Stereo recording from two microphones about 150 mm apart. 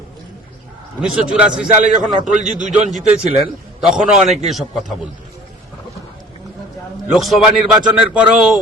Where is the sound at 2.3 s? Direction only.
60° right (ahead or behind).